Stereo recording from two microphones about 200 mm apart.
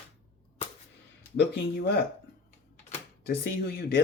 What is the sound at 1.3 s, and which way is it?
Speech, 55° left (ahead or behind).